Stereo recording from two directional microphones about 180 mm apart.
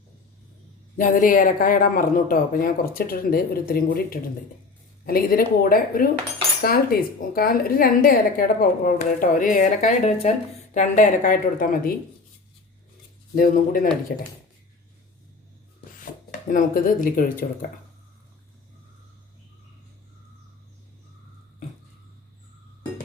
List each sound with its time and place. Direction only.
0.9 s speech: 45° left (ahead or behind)
7.2 s speech: 55° left (ahead or behind)
13.3 s speech: 50° left (ahead or behind)
16.5 s speech: 50° left (ahead or behind)